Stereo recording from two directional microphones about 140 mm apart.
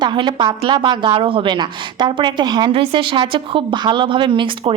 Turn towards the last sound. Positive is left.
turn(degrees=-35)  # may be behind; listen again after turning